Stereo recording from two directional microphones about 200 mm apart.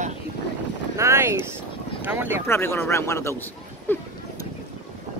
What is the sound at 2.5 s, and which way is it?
Speech, 10° left (ahead or behind).